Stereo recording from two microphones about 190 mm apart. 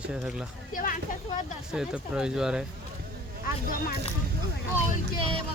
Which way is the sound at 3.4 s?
50° left (ahead or behind).